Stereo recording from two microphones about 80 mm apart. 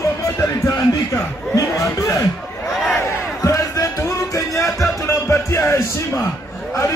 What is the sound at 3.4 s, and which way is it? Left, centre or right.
Music, left.